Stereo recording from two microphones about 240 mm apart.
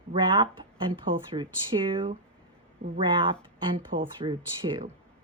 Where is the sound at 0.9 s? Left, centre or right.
Right.